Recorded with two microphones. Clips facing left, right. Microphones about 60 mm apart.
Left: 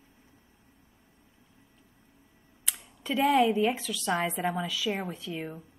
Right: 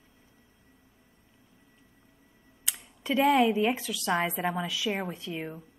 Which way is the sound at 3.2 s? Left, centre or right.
Right.